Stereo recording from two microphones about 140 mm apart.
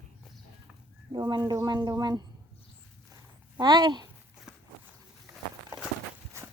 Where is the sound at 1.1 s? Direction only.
30° right (ahead or behind).